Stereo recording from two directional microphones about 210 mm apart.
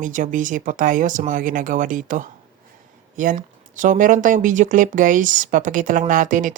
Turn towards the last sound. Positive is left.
turn(degrees=-40)  # may be behind; listen again after turning